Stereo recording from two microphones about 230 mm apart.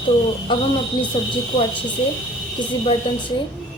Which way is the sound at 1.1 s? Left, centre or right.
Left.